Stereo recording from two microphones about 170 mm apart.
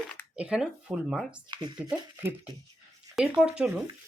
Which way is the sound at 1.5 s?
25° right (ahead or behind).